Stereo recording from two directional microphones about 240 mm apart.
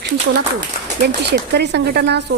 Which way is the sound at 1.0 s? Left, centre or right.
Right.